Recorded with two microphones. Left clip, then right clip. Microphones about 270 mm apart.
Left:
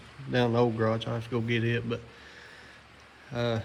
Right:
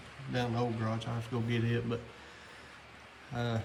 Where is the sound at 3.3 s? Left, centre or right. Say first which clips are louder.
Left 7 dB; centre.